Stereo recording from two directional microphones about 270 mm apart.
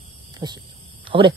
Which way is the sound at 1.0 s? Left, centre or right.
Centre.